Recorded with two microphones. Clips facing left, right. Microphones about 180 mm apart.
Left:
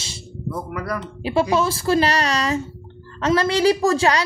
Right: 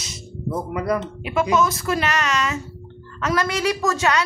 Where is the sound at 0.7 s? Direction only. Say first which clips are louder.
Right 7 dB; 20° right (ahead or behind).